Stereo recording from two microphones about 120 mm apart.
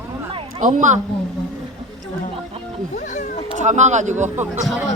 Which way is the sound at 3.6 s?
80° right.